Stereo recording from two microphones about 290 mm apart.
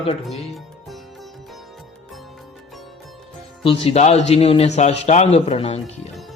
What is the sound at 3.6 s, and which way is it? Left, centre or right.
Speech, centre.